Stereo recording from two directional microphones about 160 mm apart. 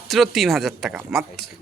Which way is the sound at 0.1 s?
Centre (ahead or behind).